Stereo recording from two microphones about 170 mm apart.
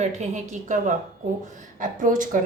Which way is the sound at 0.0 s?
45° right (ahead or behind).